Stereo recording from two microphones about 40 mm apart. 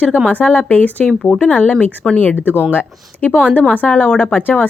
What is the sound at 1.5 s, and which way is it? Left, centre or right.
Speech, left.